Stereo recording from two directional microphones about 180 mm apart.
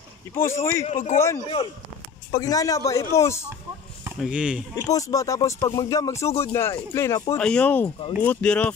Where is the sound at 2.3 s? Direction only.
20° left (ahead or behind).